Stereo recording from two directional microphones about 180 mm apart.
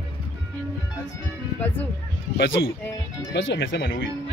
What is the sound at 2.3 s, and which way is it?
Speech, 85° left.